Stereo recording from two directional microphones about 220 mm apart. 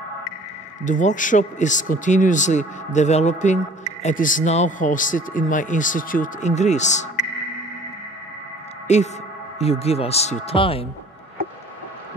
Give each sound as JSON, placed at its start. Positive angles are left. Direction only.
{"t": 0.8, "sound": "speech", "side_deg": 35}
{"t": 8.8, "sound": "speech", "side_deg": 30}